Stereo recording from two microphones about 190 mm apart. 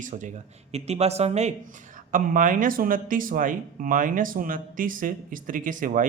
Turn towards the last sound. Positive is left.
turn(degrees=-45)  # may be behind; listen again after turning